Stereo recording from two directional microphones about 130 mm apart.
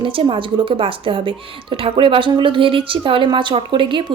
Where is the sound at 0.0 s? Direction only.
40° right (ahead or behind).